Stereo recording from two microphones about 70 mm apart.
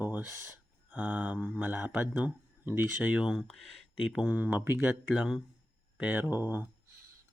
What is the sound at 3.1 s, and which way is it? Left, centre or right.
Speech, centre.